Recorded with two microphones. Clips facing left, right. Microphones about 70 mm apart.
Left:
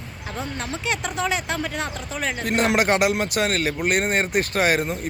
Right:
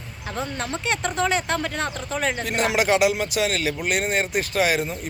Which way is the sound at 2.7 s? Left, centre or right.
Left.